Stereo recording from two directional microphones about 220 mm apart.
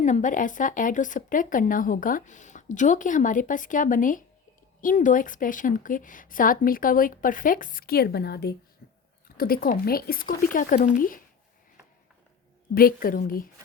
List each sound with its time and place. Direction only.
0.0 s speech: 35° left (ahead or behind)
8.8 s a sound: 40° left (ahead or behind)
9.4 s speech: 40° left (ahead or behind)
12.7 s speech: 40° left (ahead or behind)